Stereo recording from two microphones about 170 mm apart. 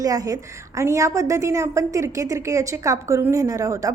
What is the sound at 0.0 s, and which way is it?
A woman's voice, 20° right (ahead or behind).